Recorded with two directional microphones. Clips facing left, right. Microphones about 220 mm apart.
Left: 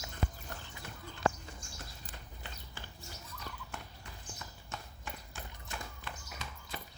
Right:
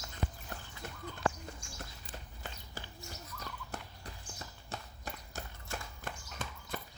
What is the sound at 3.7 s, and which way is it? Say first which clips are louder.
Clip-clop: right 2 dB; 35° right (ahead or behind).